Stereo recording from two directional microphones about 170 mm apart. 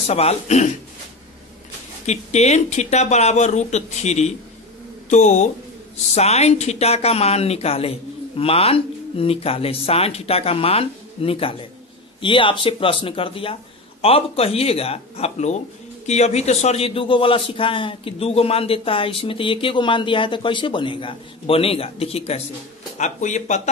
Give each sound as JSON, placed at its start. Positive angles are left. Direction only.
{"t": 0.0, "sound": "a man's voice", "side_deg": 40}
{"t": 2.0, "sound": "a man's voice", "side_deg": 40}